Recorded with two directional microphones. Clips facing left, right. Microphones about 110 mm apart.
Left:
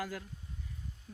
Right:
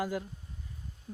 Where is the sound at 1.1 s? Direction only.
45° right (ahead or behind).